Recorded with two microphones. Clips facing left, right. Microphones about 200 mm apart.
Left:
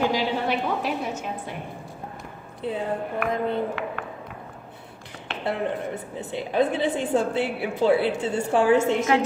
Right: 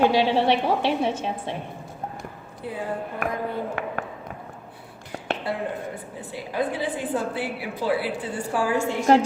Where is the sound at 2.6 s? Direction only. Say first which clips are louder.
Left 5 dB; 25° left (ahead or behind).